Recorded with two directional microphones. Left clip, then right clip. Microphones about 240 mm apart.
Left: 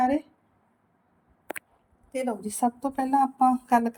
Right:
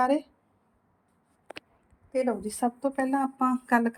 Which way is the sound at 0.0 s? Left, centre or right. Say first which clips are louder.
Even; centre.